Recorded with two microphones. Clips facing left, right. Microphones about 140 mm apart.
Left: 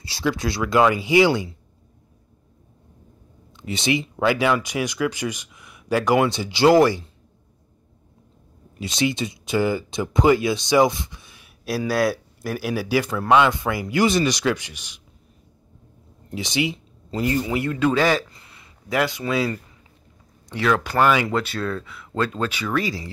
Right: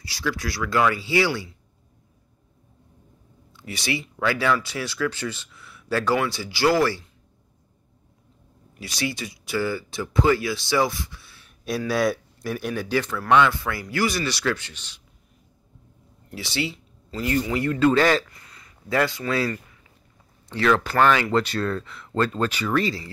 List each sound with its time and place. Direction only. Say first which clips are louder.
0.0 s speech: left 4 dB; 25° left (ahead or behind)
3.5 s speech: left 6 dB; 20° left (ahead or behind)
8.7 s speech: left 6 dB; 20° left (ahead or behind)
11.9 s speech: left 1 dB; centre (ahead or behind)
16.3 s speech: left 4 dB; 20° left (ahead or behind)
18.3 s a sound: left 1 dB; 25° left (ahead or behind)
18.9 s speech: left 1 dB; 20° left (ahead or behind)
20.6 s speech: even; 10° left (ahead or behind)